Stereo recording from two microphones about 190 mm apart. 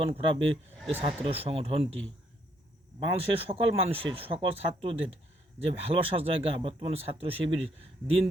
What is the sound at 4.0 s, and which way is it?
Speech, 30° right (ahead or behind).